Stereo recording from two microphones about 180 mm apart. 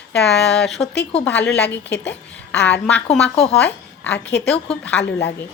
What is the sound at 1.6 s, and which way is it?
Speech, 75° left (ahead or behind).